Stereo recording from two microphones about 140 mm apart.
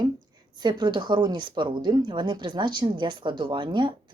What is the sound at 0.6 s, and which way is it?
Speech, 30° right (ahead or behind).